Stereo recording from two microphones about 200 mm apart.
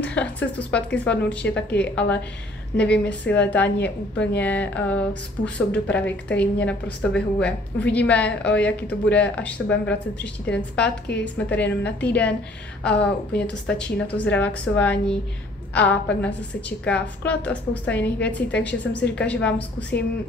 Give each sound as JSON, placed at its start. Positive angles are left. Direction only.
{"t": 0.0, "sound": "speech", "side_deg": 5}
{"t": 3.3, "sound": "speech", "side_deg": 10}
{"t": 10.8, "sound": "a woman's voice", "side_deg": 60}
{"t": 11.3, "sound": "speech", "side_deg": 10}